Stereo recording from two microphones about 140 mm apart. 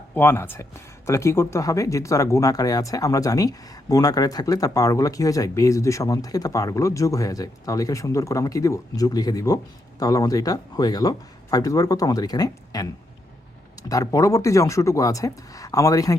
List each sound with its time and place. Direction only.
0.1 s speech: 15° left (ahead or behind)